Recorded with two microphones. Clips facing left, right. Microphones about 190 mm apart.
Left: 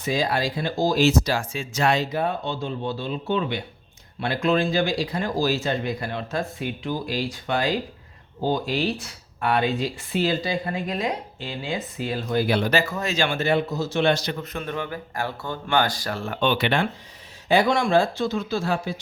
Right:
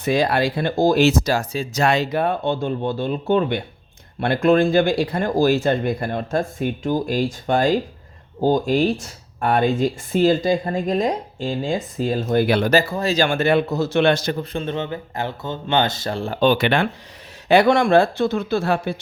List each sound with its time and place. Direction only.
0.0 s speech: 65° right (ahead or behind)
1.3 s speech: 40° right (ahead or behind)
1.9 s speech: 60° right (ahead or behind)
12.5 s speech: 55° right (ahead or behind)
12.7 s speech: 35° right (ahead or behind); by 14.3 s 50° right (ahead or behind)
14.3 s speech: 25° right (ahead or behind)
16.6 s speech: 65° right (ahead or behind)